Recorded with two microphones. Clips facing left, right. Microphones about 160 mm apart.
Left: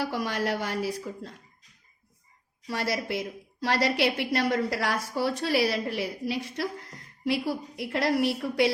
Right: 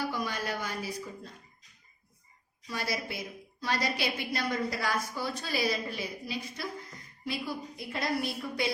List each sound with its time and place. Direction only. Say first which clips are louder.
0.0 s a woman's voice: left 5 dB; 80° left
2.6 s a woman's voice: left 5 dB; 80° left